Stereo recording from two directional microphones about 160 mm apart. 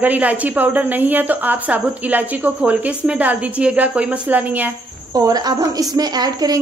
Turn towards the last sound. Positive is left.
turn(degrees=-25)  # may be behind; listen again after turning